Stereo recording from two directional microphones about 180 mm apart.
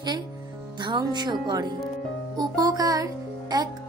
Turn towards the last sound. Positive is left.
turn(degrees=-20)  # may be behind; listen again after turning